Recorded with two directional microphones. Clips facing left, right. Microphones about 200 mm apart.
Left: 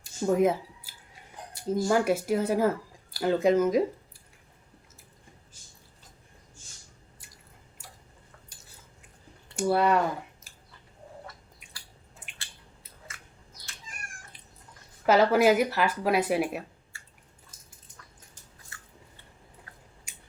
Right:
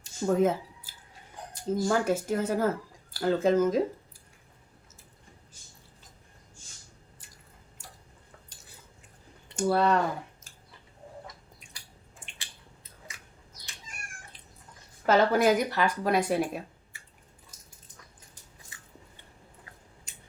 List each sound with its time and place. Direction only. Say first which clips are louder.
0.3 s speech: left 1 dB; 10° left (ahead or behind)
1.6 s speech: left 2 dB; 10° left (ahead or behind)
9.6 s speech: left 1 dB; 10° left (ahead or behind)
15.0 s speech: left 2 dB; 5° left (ahead or behind)